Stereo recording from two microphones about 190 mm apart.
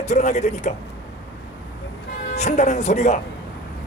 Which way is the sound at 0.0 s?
35° left (ahead or behind).